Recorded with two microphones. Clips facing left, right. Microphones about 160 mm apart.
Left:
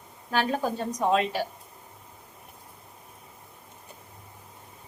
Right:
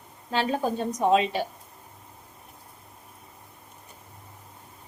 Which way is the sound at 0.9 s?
20° right (ahead or behind).